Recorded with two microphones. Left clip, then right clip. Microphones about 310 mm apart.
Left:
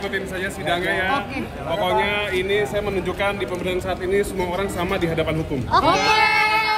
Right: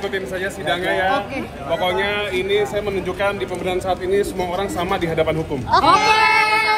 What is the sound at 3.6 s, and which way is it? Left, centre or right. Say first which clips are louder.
A man's voice: right 5 dB; centre.